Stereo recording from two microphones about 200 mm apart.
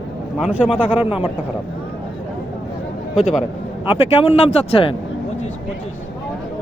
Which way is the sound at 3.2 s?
Centre (ahead or behind).